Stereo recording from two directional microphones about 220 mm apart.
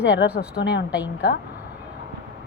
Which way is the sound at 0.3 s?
45° left (ahead or behind).